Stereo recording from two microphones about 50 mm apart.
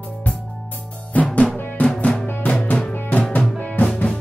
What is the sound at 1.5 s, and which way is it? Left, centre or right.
Drum, left.